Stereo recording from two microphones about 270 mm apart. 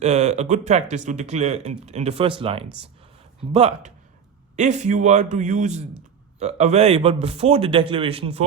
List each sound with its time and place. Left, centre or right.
0.0 s speech: right